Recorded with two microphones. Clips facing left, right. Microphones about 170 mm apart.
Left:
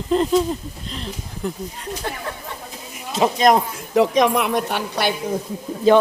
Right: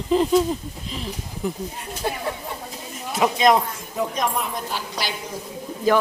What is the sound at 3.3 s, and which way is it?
Speech, 45° left (ahead or behind).